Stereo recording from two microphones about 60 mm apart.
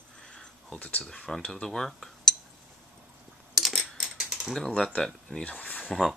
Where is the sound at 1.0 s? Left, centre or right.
Centre.